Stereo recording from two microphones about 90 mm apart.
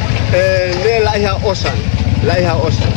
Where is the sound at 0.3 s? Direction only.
5° right (ahead or behind).